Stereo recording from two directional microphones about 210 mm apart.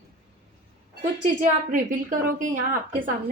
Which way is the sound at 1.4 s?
40° right (ahead or behind).